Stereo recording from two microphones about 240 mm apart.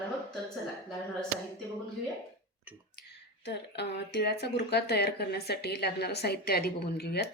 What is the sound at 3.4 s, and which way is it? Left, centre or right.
Speech, left.